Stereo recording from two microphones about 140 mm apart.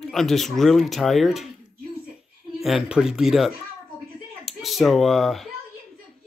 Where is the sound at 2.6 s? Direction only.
5° right (ahead or behind).